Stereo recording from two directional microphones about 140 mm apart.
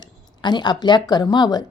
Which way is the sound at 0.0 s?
30° left (ahead or behind).